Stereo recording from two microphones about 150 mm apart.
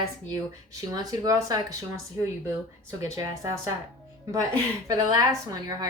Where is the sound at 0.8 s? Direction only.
25° right (ahead or behind).